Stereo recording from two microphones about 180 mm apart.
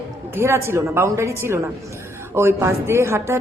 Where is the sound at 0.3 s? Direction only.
15° right (ahead or behind).